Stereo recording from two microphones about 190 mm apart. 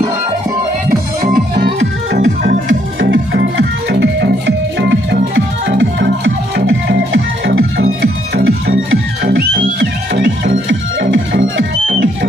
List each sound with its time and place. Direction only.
1.2 s music: 45° right (ahead or behind)
2.7 s music: 85° right; by 8.1 s 70° right (ahead or behind)
9.2 s music: 65° right (ahead or behind)